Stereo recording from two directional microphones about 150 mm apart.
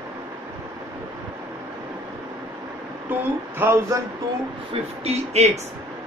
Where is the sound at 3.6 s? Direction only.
15° right (ahead or behind).